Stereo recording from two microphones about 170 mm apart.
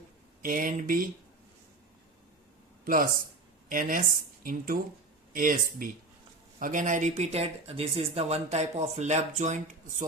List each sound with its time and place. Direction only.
0.4 s speech: 50° right (ahead or behind)
2.8 s speech: 55° right (ahead or behind)